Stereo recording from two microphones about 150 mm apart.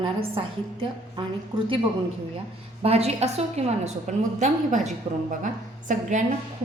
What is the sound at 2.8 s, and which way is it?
A woman's voice, 40° right (ahead or behind).